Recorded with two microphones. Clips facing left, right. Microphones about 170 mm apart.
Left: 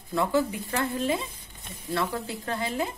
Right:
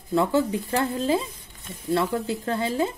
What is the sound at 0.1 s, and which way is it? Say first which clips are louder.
Speech: right 4 dB; 30° right (ahead or behind).